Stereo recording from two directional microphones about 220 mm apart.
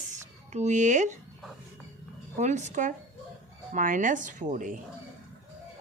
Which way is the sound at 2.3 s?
30° right (ahead or behind).